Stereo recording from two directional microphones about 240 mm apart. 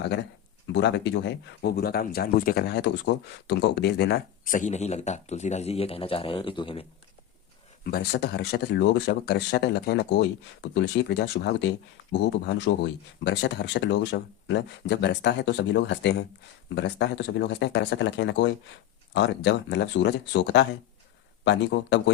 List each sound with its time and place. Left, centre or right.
0.7 s speech: left
7.9 s speech: left